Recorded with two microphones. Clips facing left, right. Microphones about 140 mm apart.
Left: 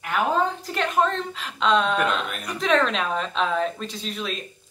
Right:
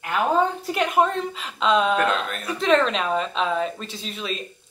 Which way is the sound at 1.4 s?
Centre (ahead or behind).